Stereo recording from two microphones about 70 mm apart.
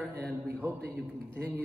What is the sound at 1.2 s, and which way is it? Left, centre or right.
Speech, right.